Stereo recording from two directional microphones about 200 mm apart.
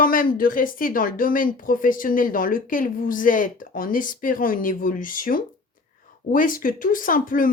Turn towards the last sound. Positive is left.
turn(degrees=45)  # may be behind; listen again after turning